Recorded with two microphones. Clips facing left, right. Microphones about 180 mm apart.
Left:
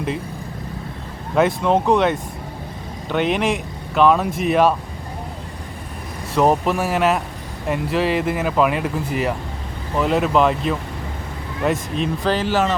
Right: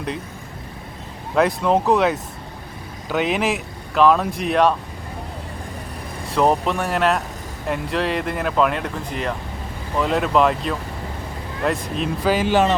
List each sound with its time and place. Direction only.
1.4 s speech: centre (ahead or behind)
6.3 s speech: 5° left (ahead or behind)
12.5 s speech: 20° right (ahead or behind)